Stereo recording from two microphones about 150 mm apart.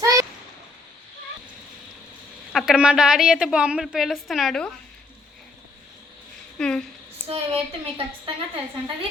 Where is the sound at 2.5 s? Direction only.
Centre (ahead or behind).